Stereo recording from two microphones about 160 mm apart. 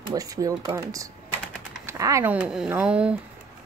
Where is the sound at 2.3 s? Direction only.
5° right (ahead or behind).